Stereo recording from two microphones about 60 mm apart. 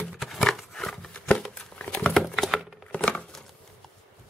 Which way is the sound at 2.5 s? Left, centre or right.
Centre.